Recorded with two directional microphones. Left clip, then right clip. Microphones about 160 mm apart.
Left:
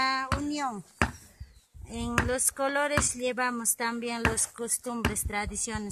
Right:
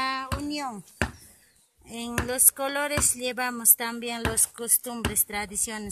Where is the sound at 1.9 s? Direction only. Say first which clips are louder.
Even; 5° right (ahead or behind).